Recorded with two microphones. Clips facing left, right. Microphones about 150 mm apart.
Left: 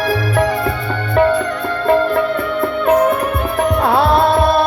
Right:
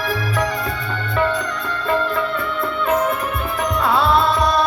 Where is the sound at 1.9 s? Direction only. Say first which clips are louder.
Left 7 dB; 55° left (ahead or behind).